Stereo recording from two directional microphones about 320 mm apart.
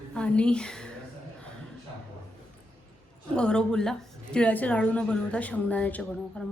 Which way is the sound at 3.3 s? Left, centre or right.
Centre.